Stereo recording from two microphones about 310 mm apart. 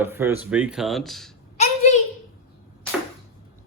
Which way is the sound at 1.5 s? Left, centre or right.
Left.